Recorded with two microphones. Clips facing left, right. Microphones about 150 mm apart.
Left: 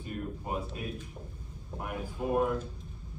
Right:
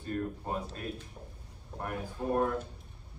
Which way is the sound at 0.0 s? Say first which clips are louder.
Right 3 dB; 10° left (ahead or behind).